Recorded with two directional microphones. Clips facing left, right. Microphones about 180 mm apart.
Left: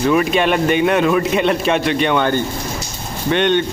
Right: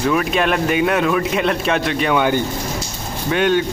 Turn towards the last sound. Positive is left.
turn(degrees=-5)  # may be behind; listen again after turning